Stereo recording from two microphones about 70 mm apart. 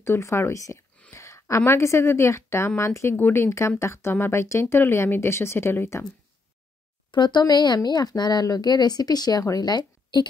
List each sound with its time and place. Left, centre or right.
0.0 s speech: left
1.1 s a sound: left
1.7 s a woman's voice: left
3.2 s speech: left
3.4 s a woman's voice: left
7.1 s a woman's voice: left